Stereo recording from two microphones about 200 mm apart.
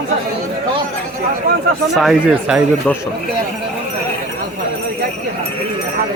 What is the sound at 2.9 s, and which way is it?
Speech, 5° left (ahead or behind).